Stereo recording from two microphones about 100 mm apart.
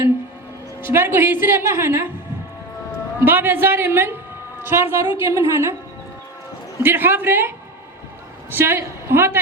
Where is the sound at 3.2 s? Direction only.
20° right (ahead or behind).